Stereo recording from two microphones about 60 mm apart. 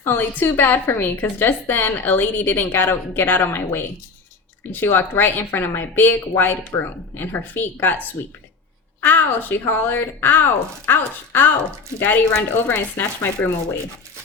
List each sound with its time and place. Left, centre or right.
0.0 s a woman's voice: left